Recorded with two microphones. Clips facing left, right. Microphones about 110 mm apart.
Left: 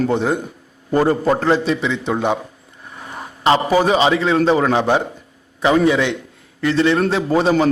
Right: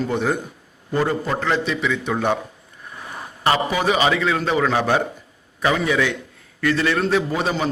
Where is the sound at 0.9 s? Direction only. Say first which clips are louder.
Left 6 dB; 40° left (ahead or behind).